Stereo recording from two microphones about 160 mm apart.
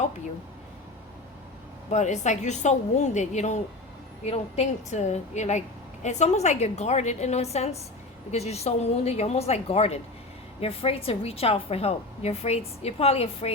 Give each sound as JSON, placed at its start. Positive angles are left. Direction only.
{"t": 1.9, "sound": "a woman's voice", "side_deg": 45}